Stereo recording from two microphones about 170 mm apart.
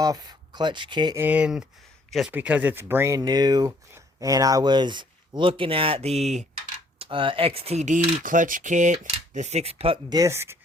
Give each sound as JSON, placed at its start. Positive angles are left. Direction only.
{"t": 0.0, "sound": "speech", "side_deg": -25}
{"t": 1.2, "sound": "a man's voice", "side_deg": -10}
{"t": 2.3, "sound": "speech", "side_deg": -10}
{"t": 10.2, "sound": "speech", "side_deg": -15}